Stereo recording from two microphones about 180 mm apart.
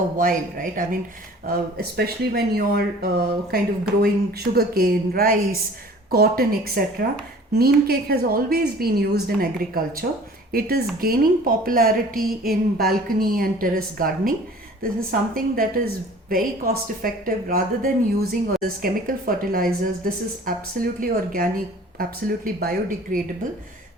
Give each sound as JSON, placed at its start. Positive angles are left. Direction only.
{"t": 0.2, "sound": "a woman's voice", "side_deg": -50}